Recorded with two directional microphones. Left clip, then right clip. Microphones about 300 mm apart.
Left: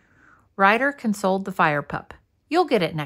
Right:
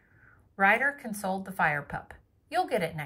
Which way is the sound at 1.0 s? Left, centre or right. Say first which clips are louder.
Left 10 dB; centre.